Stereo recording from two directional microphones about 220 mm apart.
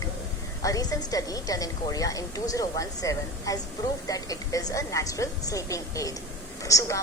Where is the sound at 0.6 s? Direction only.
15° left (ahead or behind).